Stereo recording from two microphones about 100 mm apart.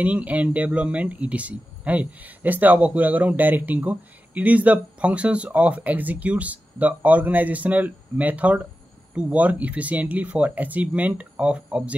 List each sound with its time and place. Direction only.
0.0 s speech: 15° right (ahead or behind)